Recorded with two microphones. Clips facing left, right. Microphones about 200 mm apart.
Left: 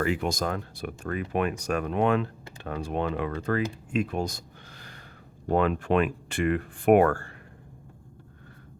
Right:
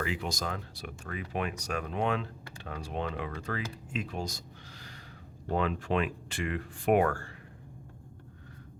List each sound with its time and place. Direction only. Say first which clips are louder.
0.0 s speech: left 7 dB; 50° left (ahead or behind)